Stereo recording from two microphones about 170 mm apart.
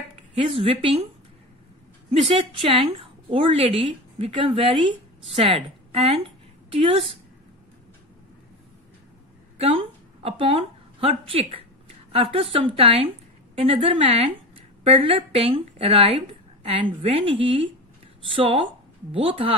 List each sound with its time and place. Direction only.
0.4 s speech: 30° right (ahead or behind)
2.0 s a woman's voice: 30° right (ahead or behind)
10.2 s speech: 35° right (ahead or behind)